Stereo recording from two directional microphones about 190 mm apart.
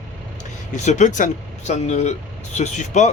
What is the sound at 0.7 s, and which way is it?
Speech, 40° left (ahead or behind).